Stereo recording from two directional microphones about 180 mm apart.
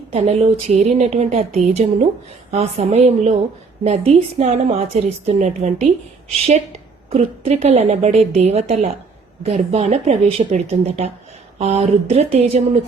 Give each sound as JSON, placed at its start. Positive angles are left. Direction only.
{"t": 0.1, "sound": "a woman's voice", "side_deg": -35}
{"t": 7.1, "sound": "a woman's voice", "side_deg": -35}